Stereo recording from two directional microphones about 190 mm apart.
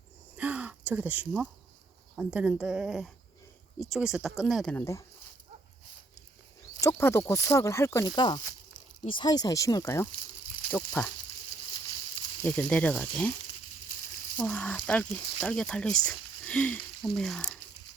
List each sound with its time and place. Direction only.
0.3 s a sound: 5° right (ahead or behind)
2.1 s speech: 5° right (ahead or behind)
6.7 s speech: 15° left (ahead or behind)
12.4 s speech: 10° left (ahead or behind)
14.3 s speech: 5° left (ahead or behind)